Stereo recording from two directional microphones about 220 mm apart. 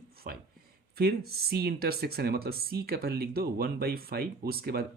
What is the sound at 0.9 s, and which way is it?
Speech, 45° right (ahead or behind).